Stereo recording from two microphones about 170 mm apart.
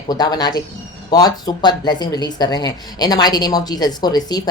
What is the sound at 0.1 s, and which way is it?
Speech, 25° left (ahead or behind).